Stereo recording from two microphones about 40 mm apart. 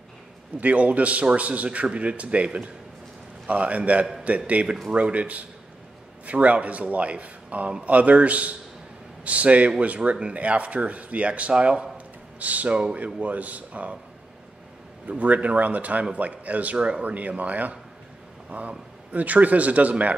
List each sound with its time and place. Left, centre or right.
0.6 s a man's voice: right
12.4 s a man's voice: right
15.0 s a man's voice: right
16.7 s speech: right
17.0 s a man's voice: right